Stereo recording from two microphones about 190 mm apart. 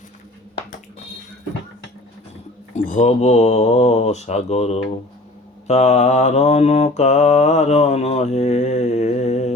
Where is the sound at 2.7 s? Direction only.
40° left (ahead or behind).